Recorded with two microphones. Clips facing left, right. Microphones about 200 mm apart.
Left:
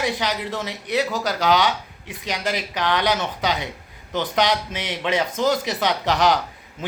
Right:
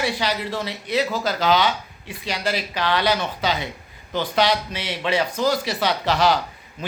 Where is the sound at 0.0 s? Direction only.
15° left (ahead or behind).